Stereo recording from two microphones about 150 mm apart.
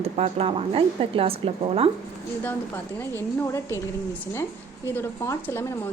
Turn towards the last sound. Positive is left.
turn(degrees=15)  # may be behind; listen again after turning